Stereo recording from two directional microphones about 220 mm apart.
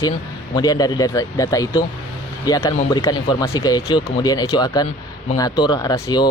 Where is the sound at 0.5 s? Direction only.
15° left (ahead or behind).